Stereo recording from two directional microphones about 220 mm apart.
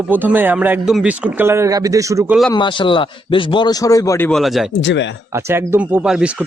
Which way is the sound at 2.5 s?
20° left (ahead or behind).